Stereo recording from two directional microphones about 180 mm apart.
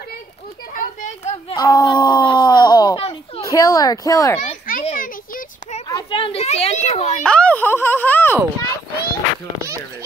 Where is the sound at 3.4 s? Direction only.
20° left (ahead or behind).